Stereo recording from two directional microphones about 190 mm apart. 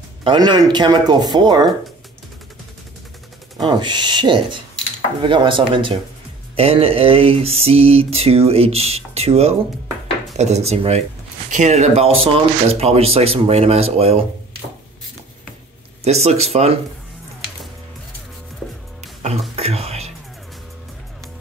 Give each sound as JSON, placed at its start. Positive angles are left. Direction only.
{"t": 0.2, "sound": "speech", "side_deg": -25}
{"t": 3.6, "sound": "speech", "side_deg": -25}
{"t": 6.5, "sound": "mantra", "side_deg": -30}
{"t": 16.0, "sound": "mantra", "side_deg": -35}
{"t": 19.5, "sound": "music", "side_deg": -35}